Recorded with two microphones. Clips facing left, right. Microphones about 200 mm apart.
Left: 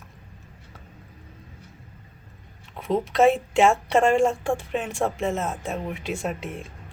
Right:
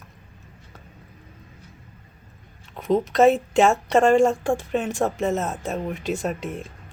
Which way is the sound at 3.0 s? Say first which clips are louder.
Right 1 dB; 40° right (ahead or behind).